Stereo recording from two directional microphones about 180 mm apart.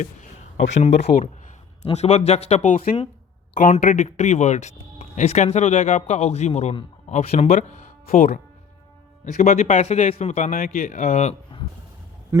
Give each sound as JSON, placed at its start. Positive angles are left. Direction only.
{"t": 0.7, "sound": "speech", "side_deg": 40}